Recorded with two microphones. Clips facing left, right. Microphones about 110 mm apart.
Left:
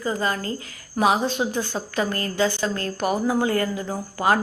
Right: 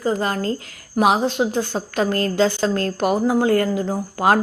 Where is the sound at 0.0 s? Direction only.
65° right (ahead or behind).